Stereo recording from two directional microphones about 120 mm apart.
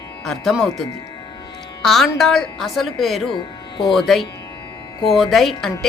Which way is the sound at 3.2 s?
40° left (ahead or behind).